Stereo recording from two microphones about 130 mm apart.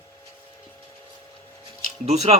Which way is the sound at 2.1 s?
55° right (ahead or behind).